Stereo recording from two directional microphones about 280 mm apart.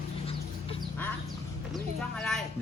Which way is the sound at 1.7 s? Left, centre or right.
Centre.